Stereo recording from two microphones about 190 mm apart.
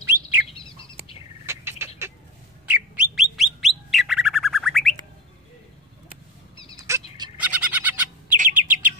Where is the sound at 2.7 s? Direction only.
5° right (ahead or behind).